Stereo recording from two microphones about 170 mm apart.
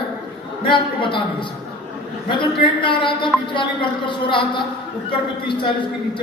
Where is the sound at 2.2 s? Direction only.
30° left (ahead or behind).